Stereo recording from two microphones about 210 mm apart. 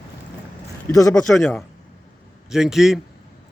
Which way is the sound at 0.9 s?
15° left (ahead or behind).